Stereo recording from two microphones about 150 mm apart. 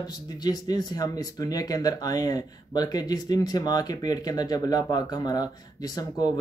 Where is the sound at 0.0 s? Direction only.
25° left (ahead or behind).